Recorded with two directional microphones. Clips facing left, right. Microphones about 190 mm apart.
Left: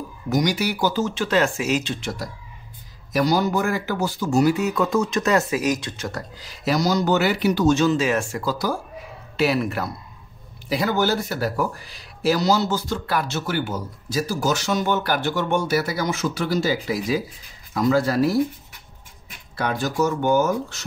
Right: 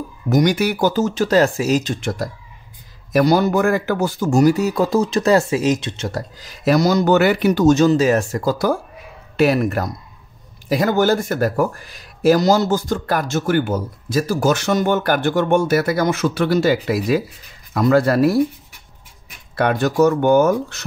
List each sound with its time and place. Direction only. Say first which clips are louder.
0.3 s speech: right 5 dB; 50° right (ahead or behind); by 6.2 s 25° right (ahead or behind)
6.4 s speech: right 6 dB; 55° right (ahead or behind)
19.5 s speech: right 7 dB; 60° right (ahead or behind)